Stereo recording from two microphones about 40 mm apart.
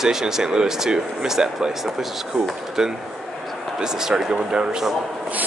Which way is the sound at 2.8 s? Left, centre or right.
Centre.